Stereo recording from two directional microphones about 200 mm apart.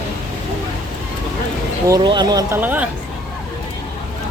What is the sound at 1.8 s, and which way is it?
Speech, 20° right (ahead or behind).